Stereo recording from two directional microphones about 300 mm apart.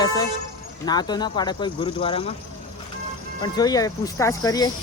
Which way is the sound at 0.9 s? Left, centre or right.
Centre.